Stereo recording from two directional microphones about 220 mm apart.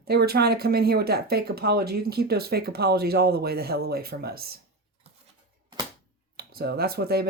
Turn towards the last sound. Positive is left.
turn(degrees=-45)  # may be behind; listen again after turning